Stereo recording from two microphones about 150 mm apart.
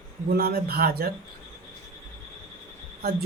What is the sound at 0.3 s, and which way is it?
Speech, 90° right.